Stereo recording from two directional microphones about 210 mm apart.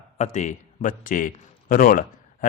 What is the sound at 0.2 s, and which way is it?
A man's voice, 35° left (ahead or behind).